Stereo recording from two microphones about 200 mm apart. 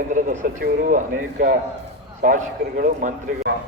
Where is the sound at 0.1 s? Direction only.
45° right (ahead or behind).